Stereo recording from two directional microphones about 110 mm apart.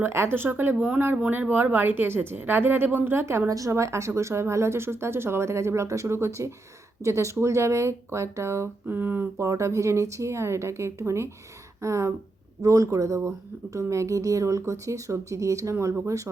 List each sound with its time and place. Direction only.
0.0 s speech: 20° right (ahead or behind)